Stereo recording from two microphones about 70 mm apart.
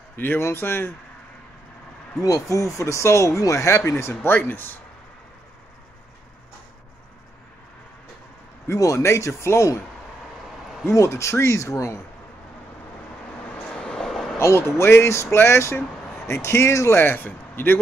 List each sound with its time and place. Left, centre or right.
0.1 s speech: left
2.2 s speech: left
4.0 s speech: left
8.6 s speech: left
10.9 s speech: left
13.7 s vehicle: centre
14.4 s speech: left
17.0 s a man's voice: left